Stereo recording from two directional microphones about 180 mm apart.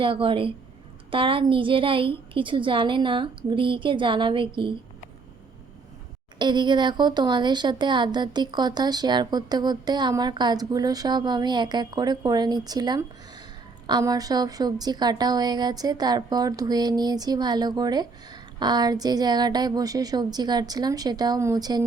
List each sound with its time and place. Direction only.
0.0 s a woman's voice: 30° right (ahead or behind)
6.4 s a woman's voice: 25° right (ahead or behind)